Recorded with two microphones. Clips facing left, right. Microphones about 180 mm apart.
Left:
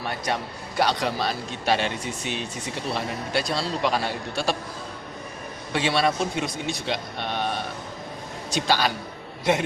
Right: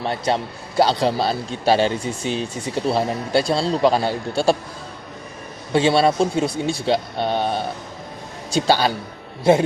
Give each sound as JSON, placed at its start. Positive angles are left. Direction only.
{"t": 0.0, "sound": "a man's voice", "side_deg": -30}
{"t": 5.7, "sound": "a man's voice", "side_deg": -30}